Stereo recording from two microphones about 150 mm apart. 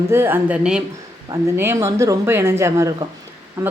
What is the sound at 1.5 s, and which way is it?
Speech, 20° right (ahead or behind).